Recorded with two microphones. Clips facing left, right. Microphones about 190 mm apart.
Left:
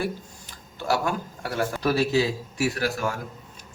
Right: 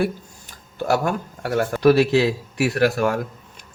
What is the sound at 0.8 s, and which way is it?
Speech, 50° right (ahead or behind).